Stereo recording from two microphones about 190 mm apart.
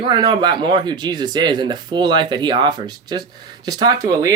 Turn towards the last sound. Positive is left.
turn(degrees=-15)  # may be behind; listen again after turning